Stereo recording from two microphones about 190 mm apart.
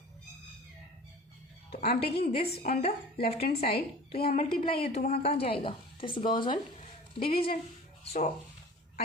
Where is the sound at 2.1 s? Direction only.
55° left (ahead or behind).